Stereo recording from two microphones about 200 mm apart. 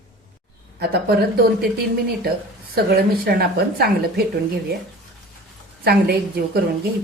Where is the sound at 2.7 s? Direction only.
50° right (ahead or behind).